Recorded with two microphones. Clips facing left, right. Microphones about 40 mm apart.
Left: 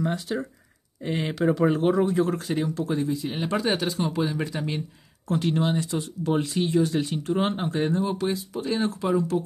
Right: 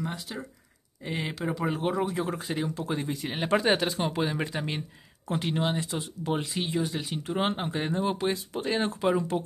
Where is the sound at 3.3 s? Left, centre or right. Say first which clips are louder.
Right 4 dB; right.